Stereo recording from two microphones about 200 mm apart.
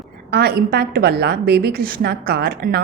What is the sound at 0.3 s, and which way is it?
A woman's voice, 50° right (ahead or behind).